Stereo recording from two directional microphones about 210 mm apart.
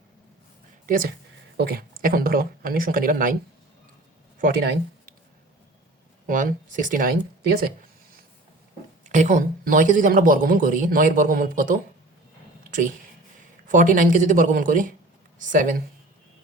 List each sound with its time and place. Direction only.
0.9 s speech: 40° right (ahead or behind)
4.4 s speech: 45° right (ahead or behind)
6.2 s a man's voice: 40° right (ahead or behind)
9.0 s a man's voice: 35° right (ahead or behind)
13.7 s a man's voice: 40° right (ahead or behind)